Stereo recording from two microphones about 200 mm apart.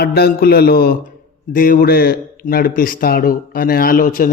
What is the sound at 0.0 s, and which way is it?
A man's voice, 50° left (ahead or behind).